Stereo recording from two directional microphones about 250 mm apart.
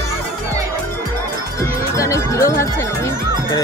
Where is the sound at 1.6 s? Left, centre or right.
Centre.